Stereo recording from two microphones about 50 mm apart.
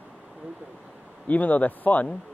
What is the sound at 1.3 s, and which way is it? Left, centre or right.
Speech, left.